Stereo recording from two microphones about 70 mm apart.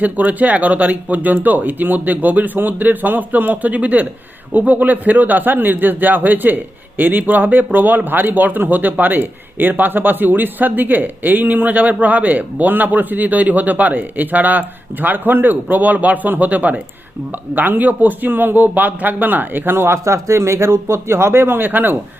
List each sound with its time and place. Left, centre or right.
0.0 s speech: right